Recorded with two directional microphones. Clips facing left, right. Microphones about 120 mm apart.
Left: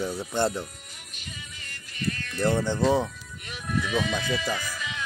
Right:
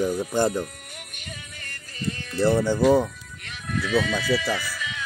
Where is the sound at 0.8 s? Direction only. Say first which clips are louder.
Right 4 dB; 60° right (ahead or behind).